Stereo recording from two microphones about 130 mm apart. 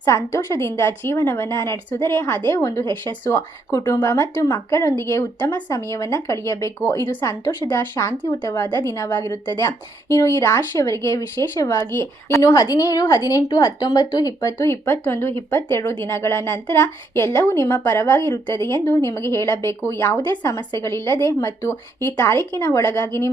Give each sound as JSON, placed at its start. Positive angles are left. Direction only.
{"t": 0.0, "sound": "a woman's voice", "side_deg": 25}